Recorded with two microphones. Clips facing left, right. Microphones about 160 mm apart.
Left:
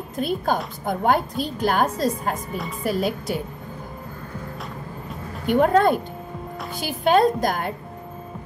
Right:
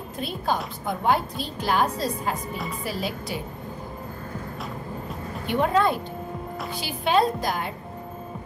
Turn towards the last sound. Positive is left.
turn(degrees=50)  # may be behind; listen again after turning